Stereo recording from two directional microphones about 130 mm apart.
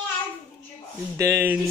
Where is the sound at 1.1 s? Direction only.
20° right (ahead or behind).